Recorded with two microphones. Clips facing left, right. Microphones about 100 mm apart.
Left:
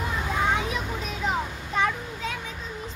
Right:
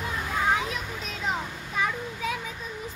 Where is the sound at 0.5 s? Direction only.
Centre (ahead or behind).